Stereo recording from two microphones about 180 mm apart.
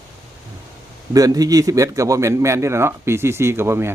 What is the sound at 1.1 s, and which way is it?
Speech, 20° right (ahead or behind).